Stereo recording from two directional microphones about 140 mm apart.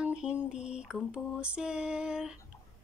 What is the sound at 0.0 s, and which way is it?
Mantra, 5° right (ahead or behind).